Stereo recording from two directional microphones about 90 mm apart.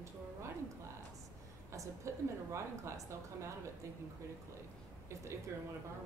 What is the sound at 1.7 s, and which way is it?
A woman's voice, 35° right (ahead or behind).